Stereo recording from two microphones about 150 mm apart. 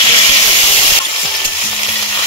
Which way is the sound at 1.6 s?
35° left (ahead or behind).